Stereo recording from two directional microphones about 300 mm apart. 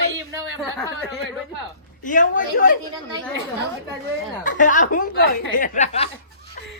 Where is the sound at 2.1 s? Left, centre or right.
Left.